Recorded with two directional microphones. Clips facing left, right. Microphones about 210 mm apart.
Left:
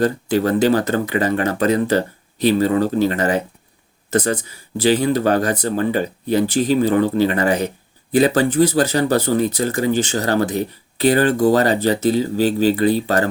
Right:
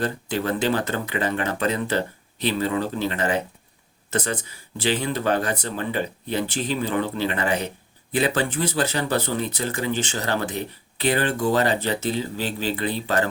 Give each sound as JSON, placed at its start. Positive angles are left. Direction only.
{"t": 0.0, "sound": "speech", "side_deg": 40}